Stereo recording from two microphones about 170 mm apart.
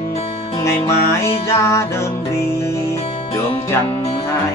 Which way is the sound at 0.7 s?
15° left (ahead or behind).